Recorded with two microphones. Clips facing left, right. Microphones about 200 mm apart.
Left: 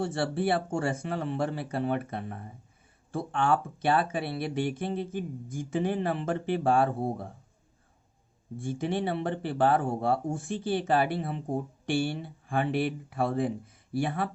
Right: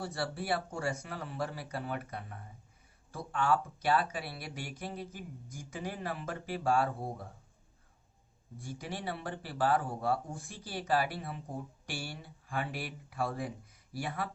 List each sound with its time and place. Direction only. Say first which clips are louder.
0.0 s speech: left 9 dB; 25° left (ahead or behind)
8.5 s speech: left 11 dB; 25° left (ahead or behind)